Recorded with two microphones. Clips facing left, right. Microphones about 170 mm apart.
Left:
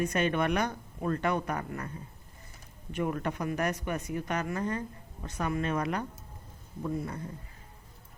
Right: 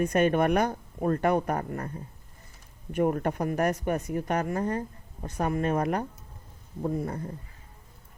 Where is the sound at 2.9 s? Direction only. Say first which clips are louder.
Right 6 dB; 45° right (ahead or behind).